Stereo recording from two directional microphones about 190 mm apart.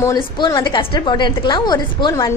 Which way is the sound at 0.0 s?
20° left (ahead or behind).